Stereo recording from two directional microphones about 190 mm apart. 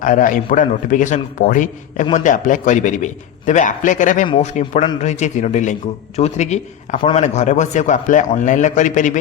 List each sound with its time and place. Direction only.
0.0 s a man's voice: 45° left (ahead or behind)